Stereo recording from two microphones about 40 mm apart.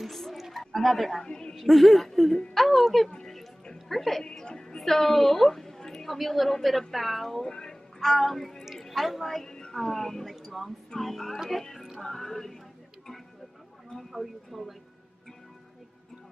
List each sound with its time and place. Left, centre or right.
0.0 s a sound: centre
0.7 s a woman's voice: centre
1.2 s music: centre
1.5 s a woman's voice: centre
4.2 s music: centre
4.8 s a woman's voice: centre
7.4 s speech: left
8.0 s a woman's voice: centre
9.5 s speech: centre
10.3 s a woman's voice: centre
11.3 s speech: centre
12.0 s music: centre
13.9 s a woman's voice: centre